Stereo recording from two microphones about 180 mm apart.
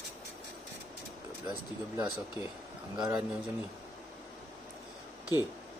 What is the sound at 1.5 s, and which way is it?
Speech, 20° right (ahead or behind).